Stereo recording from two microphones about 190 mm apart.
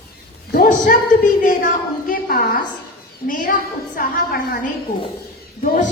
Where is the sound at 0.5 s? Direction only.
50° left (ahead or behind).